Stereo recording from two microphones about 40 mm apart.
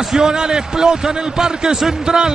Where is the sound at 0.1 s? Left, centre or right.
Centre.